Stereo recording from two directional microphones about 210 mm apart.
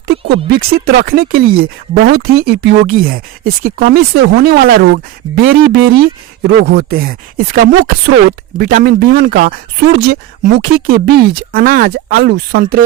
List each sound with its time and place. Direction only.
0.1 s speech: 50° right (ahead or behind)